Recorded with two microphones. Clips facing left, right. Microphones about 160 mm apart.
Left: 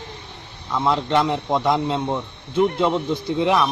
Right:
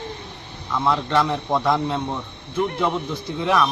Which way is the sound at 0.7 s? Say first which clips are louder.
Left 1 dB; 20° left (ahead or behind).